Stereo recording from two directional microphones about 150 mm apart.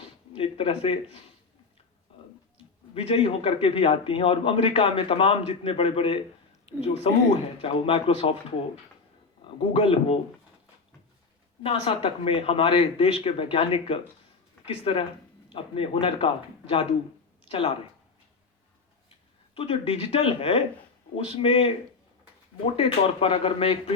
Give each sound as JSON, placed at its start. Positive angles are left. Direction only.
{"t": 0.0, "sound": "a sound", "side_deg": 35}
{"t": 2.9, "sound": "a man's voice", "side_deg": 35}
{"t": 6.7, "sound": "a woman's voice", "side_deg": 50}
{"t": 9.6, "sound": "a man's voice", "side_deg": 35}
{"t": 11.6, "sound": "a man's voice", "side_deg": 35}
{"t": 19.5, "sound": "a man's voice", "side_deg": 40}